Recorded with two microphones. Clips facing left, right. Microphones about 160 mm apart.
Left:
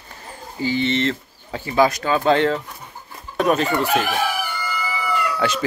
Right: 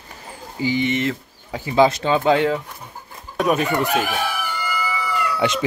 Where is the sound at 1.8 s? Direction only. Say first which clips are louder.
Right 1 dB; 25° right (ahead or behind).